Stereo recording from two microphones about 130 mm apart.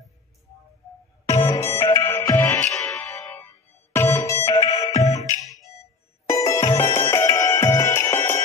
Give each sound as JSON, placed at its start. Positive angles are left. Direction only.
{"t": 1.2, "sound": "music", "side_deg": 25}
{"t": 6.2, "sound": "music", "side_deg": 25}